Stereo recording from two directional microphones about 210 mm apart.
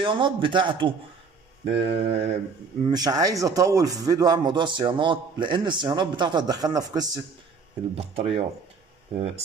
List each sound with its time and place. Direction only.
0.0 s a man's voice: 25° right (ahead or behind)
2.8 s a man's voice: 20° right (ahead or behind)
7.9 s a man's voice: 30° right (ahead or behind)